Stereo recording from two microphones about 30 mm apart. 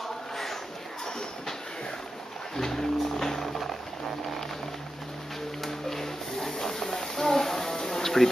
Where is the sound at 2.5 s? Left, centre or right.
Centre.